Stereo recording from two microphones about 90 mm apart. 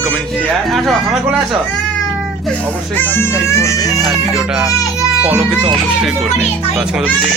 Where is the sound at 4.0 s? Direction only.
Centre (ahead or behind).